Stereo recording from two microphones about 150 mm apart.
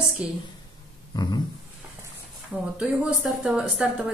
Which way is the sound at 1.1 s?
25° left (ahead or behind).